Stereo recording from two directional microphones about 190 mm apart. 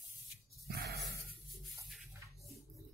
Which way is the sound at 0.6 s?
55° right (ahead or behind).